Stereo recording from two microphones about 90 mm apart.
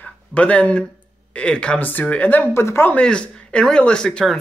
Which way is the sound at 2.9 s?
10° left (ahead or behind).